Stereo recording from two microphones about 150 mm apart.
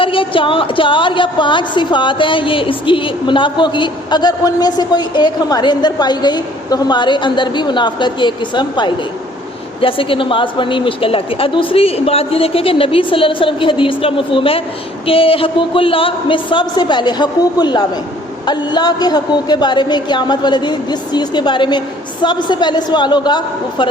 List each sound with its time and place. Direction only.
0.0 s a woman's voice: 35° left (ahead or behind)